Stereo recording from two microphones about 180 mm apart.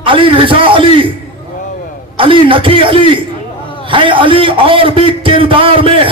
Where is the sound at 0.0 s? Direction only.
30° right (ahead or behind).